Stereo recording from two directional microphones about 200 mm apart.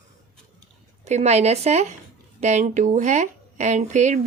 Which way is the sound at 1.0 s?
35° right (ahead or behind).